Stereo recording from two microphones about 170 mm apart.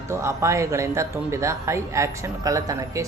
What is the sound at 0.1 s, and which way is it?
Speech, 15° right (ahead or behind).